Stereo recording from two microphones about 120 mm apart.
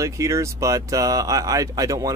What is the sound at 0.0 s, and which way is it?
Speech, 25° right (ahead or behind).